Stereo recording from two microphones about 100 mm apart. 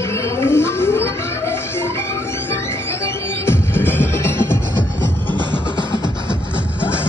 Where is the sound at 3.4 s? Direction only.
20° left (ahead or behind).